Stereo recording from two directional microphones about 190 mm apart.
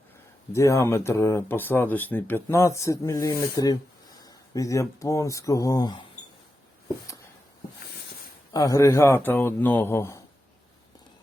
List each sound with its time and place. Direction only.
0.5 s speech: 15° left (ahead or behind)
8.5 s speech: 20° left (ahead or behind)